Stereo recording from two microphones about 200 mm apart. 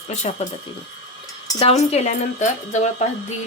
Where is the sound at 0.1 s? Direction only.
35° left (ahead or behind).